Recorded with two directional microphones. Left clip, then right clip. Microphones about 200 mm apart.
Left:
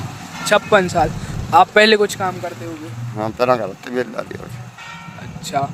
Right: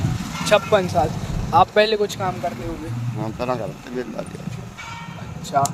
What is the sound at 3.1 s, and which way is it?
Speech, 60° left (ahead or behind).